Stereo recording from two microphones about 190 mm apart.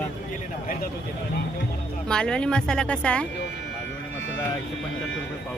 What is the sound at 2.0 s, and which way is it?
Speech, 5° left (ahead or behind).